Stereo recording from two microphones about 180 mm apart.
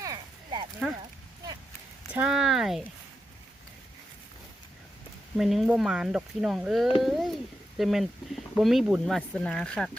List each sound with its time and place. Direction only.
0.0 s a sound: 25° right (ahead or behind)
2.1 s speech: 5° right (ahead or behind)
5.4 s speech: centre (ahead or behind)